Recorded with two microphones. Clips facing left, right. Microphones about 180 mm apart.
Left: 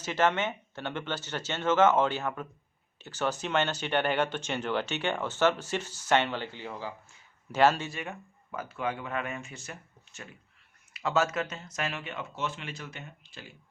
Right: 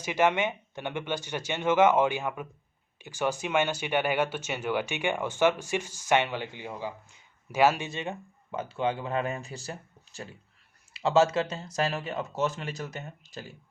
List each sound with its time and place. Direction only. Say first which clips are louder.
0.0 s speech: right 2 dB; 15° right (ahead or behind)
7.9 s speech: right 4 dB; 25° right (ahead or behind); by 13.5 s 40° right (ahead or behind)